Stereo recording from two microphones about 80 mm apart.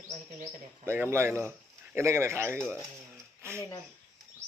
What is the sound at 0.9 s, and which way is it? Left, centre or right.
A man's voice, right.